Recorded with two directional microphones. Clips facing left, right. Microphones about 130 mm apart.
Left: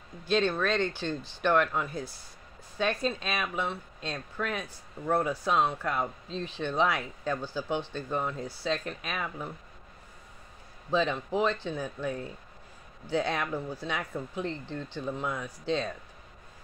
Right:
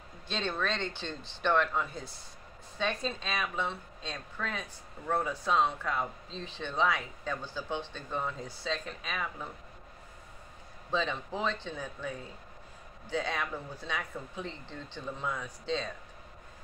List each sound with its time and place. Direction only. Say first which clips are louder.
0.3 s speech: left 7 dB; 5° left (ahead or behind)
10.9 s speech: left 5 dB; 10° left (ahead or behind)